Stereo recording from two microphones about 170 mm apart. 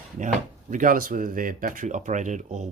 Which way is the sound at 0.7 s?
50° right (ahead or behind).